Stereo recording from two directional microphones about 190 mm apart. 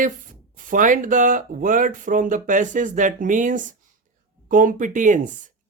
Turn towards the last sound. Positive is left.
turn(degrees=-40)  # may be behind; listen again after turning